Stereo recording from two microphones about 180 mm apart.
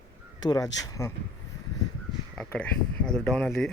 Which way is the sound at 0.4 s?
20° left (ahead or behind).